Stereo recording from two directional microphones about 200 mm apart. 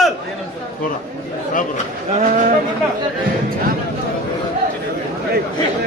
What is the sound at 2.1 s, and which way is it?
Speech, 40° right (ahead or behind).